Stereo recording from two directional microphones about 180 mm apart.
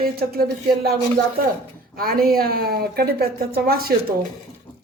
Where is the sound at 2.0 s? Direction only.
55° right (ahead or behind).